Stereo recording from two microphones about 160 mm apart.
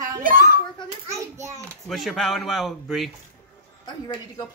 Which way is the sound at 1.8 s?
Centre (ahead or behind).